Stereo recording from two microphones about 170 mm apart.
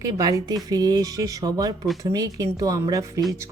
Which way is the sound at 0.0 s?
20° right (ahead or behind).